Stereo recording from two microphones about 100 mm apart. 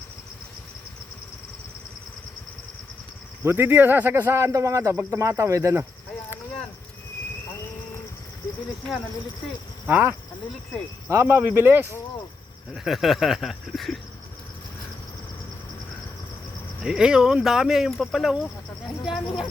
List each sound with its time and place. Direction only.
3.4 s speech: 20° right (ahead or behind)
9.8 s speech: 15° right (ahead or behind)
11.1 s speech: 25° right (ahead or behind)
12.7 s speech: 5° right (ahead or behind)
16.8 s speech: 5° right (ahead or behind)